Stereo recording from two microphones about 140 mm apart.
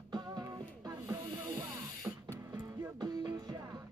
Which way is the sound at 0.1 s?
30° right (ahead or behind).